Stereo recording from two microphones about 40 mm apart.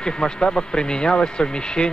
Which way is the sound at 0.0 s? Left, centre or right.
Left.